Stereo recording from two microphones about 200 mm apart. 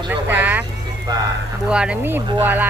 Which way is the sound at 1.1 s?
20° right (ahead or behind).